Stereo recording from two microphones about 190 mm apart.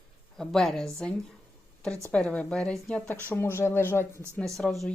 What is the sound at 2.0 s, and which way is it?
Speech, 5° left (ahead or behind).